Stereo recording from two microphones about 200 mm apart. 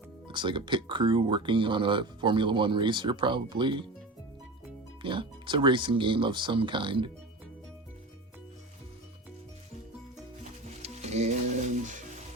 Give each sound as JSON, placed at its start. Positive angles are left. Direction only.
{"t": 0.3, "sound": "speech", "side_deg": -25}
{"t": 5.0, "sound": "speech", "side_deg": -25}
{"t": 10.8, "sound": "music", "side_deg": -35}